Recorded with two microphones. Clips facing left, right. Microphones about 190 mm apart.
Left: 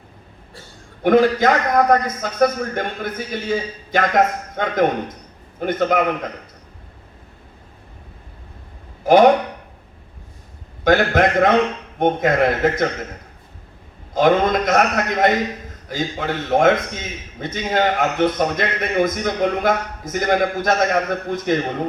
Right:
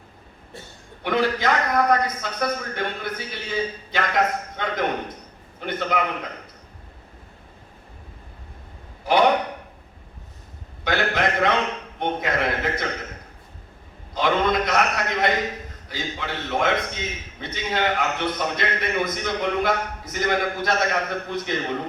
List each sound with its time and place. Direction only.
1.0 s a man's voice: 45° left (ahead or behind)
9.0 s a man's voice: 45° left (ahead or behind)
10.8 s a man's voice: 45° left (ahead or behind)
14.1 s a man's voice: 45° left (ahead or behind)